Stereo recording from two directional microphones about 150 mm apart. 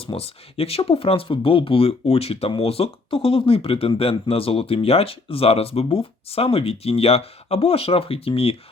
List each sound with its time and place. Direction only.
0.0 s speech: 40° left (ahead or behind)